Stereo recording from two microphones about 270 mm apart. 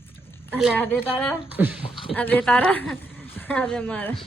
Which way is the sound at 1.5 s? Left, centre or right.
Centre.